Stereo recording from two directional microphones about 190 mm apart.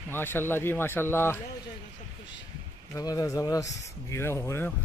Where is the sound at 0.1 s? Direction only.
10° left (ahead or behind).